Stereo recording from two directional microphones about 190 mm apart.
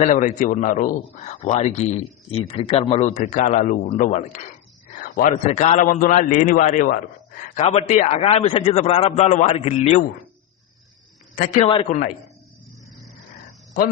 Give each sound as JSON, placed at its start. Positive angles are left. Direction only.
{"t": 0.0, "sound": "a man's voice", "side_deg": 40}
{"t": 4.9, "sound": "a sound", "side_deg": 45}
{"t": 5.5, "sound": "a man's voice", "side_deg": 35}
{"t": 7.6, "sound": "a man's voice", "side_deg": 30}
{"t": 11.3, "sound": "a man's voice", "side_deg": 40}